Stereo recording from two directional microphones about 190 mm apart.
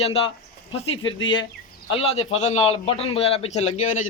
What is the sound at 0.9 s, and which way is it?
Speech, 85° left.